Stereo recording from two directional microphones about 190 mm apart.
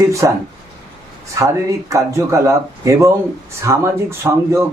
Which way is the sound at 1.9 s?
15° right (ahead or behind).